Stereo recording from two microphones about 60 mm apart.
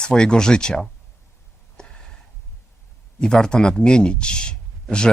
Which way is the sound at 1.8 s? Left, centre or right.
Centre.